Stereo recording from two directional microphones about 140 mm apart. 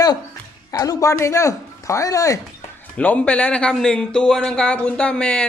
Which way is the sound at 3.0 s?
10° left (ahead or behind).